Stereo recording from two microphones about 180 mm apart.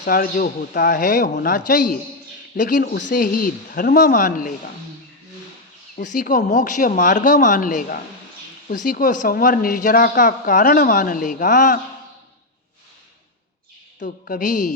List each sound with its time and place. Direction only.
0.0 s a woman's voice: 50° left (ahead or behind)
6.0 s a woman's voice: 45° left (ahead or behind)
14.0 s a woman's voice: 50° left (ahead or behind)